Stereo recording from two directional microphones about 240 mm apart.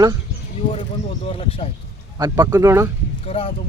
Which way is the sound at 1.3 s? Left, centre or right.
Left.